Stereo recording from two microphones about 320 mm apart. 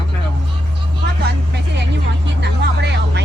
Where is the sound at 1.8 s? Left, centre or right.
Right.